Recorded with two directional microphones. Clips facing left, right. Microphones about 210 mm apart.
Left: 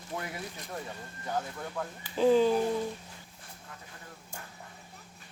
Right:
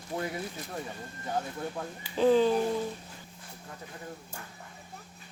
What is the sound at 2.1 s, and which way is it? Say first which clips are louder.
Speech: even; 5° left (ahead or behind).